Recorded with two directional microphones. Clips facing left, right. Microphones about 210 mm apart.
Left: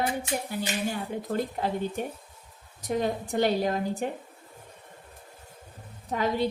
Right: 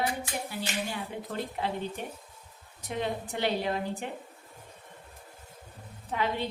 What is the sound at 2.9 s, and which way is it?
Speech, 40° left (ahead or behind).